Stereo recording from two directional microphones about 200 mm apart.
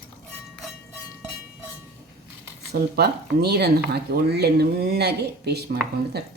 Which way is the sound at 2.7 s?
55° right (ahead or behind).